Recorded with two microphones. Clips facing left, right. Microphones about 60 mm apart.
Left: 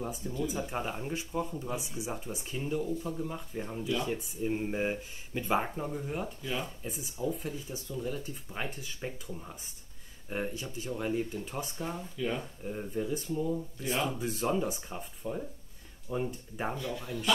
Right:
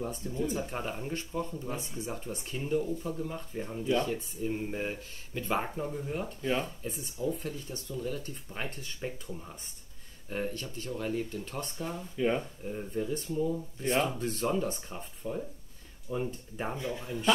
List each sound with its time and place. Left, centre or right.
0.0 s speech: centre
16.7 s speech: right